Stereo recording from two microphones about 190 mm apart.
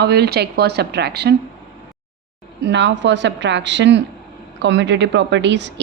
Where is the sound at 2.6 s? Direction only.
65° right (ahead or behind).